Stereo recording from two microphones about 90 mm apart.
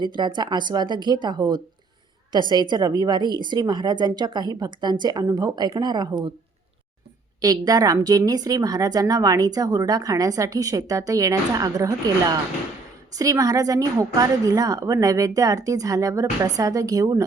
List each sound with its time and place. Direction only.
0.0 s a woman's voice: 55° right (ahead or behind)
7.4 s a woman's voice: 45° right (ahead or behind)